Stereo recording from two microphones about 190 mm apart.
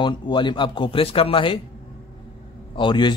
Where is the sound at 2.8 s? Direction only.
25° left (ahead or behind).